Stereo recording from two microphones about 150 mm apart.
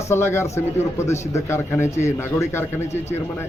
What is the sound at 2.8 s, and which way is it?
Speech, 45° left (ahead or behind).